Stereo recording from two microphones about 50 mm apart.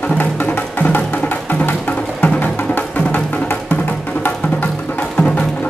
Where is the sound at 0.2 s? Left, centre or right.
Left.